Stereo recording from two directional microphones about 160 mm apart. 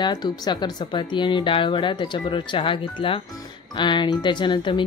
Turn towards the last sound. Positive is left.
turn(degrees=30)  # may be behind; listen again after turning